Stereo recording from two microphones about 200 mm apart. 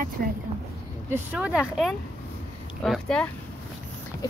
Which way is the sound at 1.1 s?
10° right (ahead or behind).